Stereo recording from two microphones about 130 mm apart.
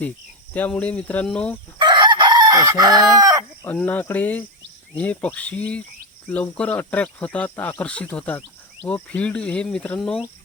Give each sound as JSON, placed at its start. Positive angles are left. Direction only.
{"t": 0.5, "sound": "speech", "side_deg": 10}
{"t": 1.8, "sound": "chicken", "side_deg": -35}
{"t": 3.7, "sound": "speech", "side_deg": 15}